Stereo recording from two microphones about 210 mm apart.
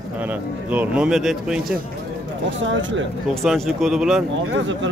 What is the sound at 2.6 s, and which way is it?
Speech, 60° right (ahead or behind).